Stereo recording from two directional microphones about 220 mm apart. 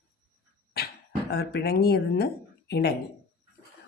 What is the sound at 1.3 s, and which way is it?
Speech, 45° left (ahead or behind).